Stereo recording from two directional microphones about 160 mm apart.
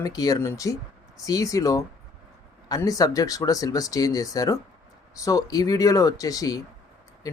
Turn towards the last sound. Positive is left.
turn(degrees=20)  # may be behind; listen again after turning